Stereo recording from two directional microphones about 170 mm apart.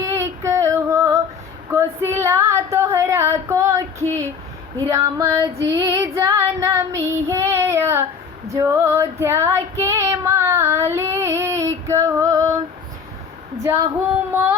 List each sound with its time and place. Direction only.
0.0 s female singing: 15° right (ahead or behind)
4.9 s child singing: 20° right (ahead or behind)
8.5 s female singing: 15° right (ahead or behind)